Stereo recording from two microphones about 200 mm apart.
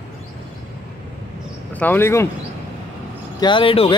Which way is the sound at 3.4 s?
25° left (ahead or behind).